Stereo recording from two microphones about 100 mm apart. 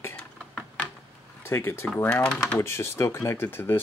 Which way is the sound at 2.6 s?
30° left (ahead or behind).